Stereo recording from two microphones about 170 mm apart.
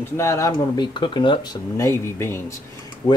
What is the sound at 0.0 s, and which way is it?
Speech, 15° left (ahead or behind).